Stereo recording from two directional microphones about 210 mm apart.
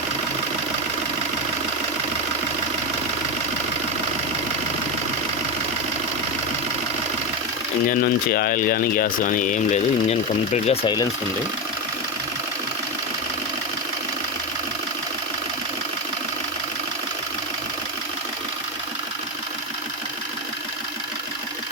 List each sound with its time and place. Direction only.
7.9 s speech: 45° left (ahead or behind); by 11.0 s 25° left (ahead or behind)